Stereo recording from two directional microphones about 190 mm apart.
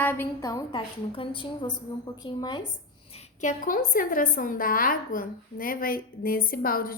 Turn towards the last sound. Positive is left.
turn(degrees=50)  # may be behind; listen again after turning